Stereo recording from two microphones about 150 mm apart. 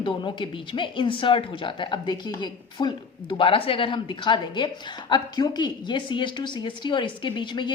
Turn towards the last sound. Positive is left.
turn(degrees=30)  # may be behind; listen again after turning